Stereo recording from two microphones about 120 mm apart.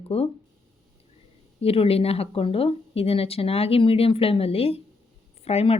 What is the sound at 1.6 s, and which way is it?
A woman's voice, 55° left (ahead or behind).